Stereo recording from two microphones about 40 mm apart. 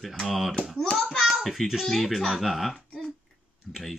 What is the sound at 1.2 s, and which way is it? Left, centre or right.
Child singing, centre.